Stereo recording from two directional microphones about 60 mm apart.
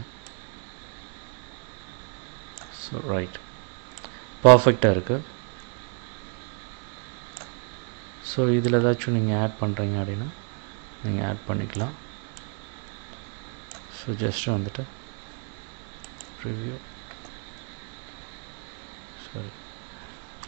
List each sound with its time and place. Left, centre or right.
2.8 s speech: centre
8.2 s speech: left
13.9 s speech: left
16.4 s speech: left